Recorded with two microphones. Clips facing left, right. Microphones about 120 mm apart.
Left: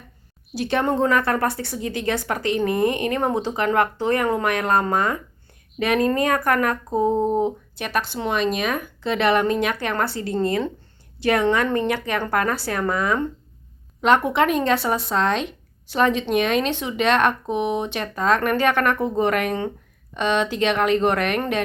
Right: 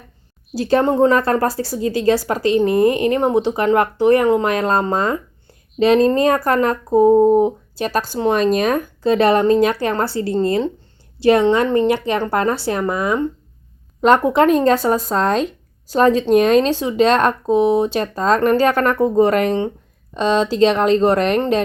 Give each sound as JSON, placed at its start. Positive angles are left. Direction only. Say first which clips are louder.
{"t": 0.5, "sound": "speech", "louder": "right 6 dB", "side_deg": -35}
{"t": 7.8, "sound": "speech", "louder": "right 6 dB", "side_deg": -35}
{"t": 14.0, "sound": "speech", "louder": "right 5 dB", "side_deg": -40}